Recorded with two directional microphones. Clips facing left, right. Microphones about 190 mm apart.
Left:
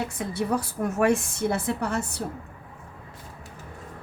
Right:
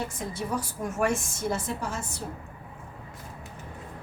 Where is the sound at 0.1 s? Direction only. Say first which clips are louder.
Left 5 dB; 65° left (ahead or behind).